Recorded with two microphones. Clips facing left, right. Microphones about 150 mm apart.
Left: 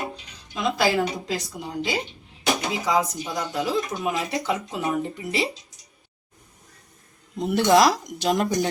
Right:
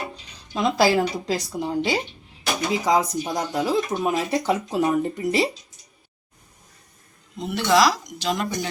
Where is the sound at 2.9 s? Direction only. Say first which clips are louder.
Right 2 dB; 40° right (ahead or behind).